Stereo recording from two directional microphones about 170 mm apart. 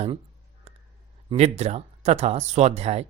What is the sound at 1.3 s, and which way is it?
Speech, 40° right (ahead or behind).